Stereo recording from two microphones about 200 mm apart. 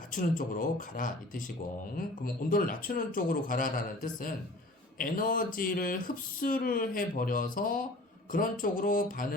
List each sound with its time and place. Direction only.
0.1 s a man's voice: 45° left (ahead or behind)